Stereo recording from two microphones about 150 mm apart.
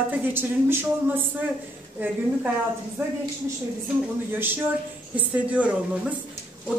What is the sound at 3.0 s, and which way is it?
Speech, 15° right (ahead or behind).